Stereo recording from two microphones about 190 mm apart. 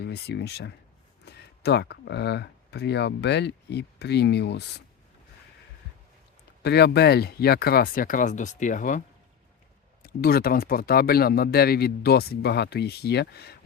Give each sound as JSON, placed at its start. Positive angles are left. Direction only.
{"t": 0.0, "sound": "speech", "side_deg": 60}
{"t": 6.6, "sound": "speech", "side_deg": 60}